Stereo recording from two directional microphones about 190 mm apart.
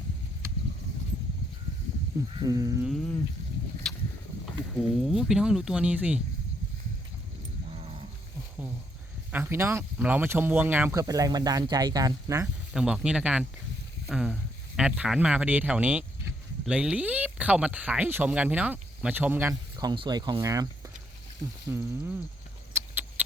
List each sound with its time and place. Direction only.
2.3 s speech: 20° right (ahead or behind)
2.8 s speech: centre (ahead or behind)
3.9 s a sound: centre (ahead or behind)
4.8 s speech: centre (ahead or behind)
7.7 s livestock: 30° right (ahead or behind)
9.3 s speech: 15° right (ahead or behind)
12.7 s speech: 5° right (ahead or behind)
21.7 s speech: 10° right (ahead or behind)
22.7 s a sound: 10° right (ahead or behind)